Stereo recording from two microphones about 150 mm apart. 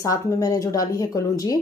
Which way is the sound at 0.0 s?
20° left (ahead or behind).